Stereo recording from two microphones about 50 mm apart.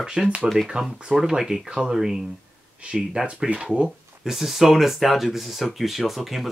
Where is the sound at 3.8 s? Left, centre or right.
Centre.